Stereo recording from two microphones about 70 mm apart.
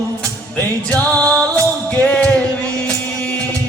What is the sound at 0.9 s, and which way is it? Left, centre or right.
Music, centre.